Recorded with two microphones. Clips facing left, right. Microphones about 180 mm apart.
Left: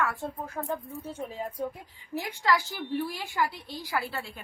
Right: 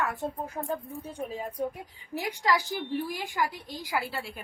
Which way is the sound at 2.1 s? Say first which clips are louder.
Even; 15° right (ahead or behind).